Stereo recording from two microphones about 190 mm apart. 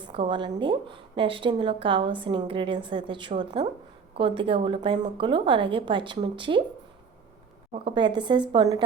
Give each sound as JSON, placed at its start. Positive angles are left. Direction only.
{"t": 0.0, "sound": "a woman's voice", "side_deg": -25}
{"t": 7.7, "sound": "a woman's voice", "side_deg": -25}